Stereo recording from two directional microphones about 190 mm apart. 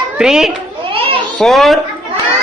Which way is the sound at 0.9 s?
30° right (ahead or behind).